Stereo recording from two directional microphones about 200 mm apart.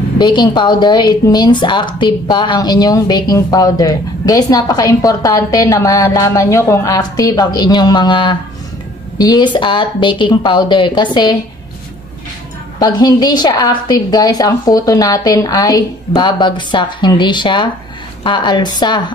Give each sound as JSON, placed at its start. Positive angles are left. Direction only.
{"t": 0.2, "sound": "a woman's voice", "side_deg": 20}
{"t": 12.7, "sound": "a woman's voice", "side_deg": 20}